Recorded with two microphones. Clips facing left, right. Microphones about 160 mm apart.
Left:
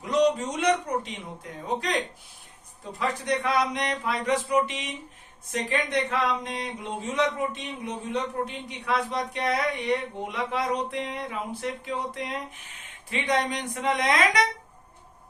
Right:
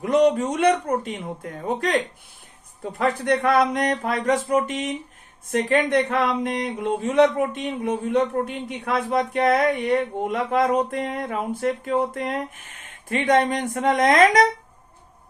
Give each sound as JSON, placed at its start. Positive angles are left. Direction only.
{"t": 0.0, "sound": "speech", "side_deg": -55}
{"t": 3.0, "sound": "speech", "side_deg": -50}